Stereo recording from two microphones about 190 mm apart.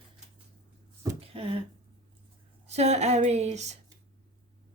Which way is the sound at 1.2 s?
30° right (ahead or behind).